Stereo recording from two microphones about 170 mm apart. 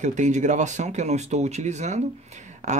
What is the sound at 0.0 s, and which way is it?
Speech, 45° right (ahead or behind).